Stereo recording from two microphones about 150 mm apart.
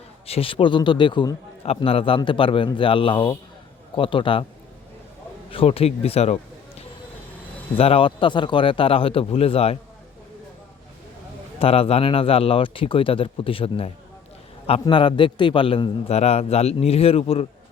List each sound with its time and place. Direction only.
0.3 s a man's voice: 40° left (ahead or behind)
1.6 s a man's voice: 40° left (ahead or behind)
5.5 s a man's voice: 40° left (ahead or behind)
11.6 s a man's voice: 40° left (ahead or behind)